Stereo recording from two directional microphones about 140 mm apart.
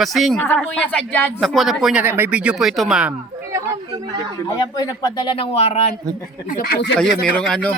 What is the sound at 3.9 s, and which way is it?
Speech, 25° right (ahead or behind).